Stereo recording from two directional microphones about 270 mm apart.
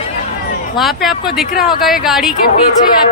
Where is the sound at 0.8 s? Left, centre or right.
Centre.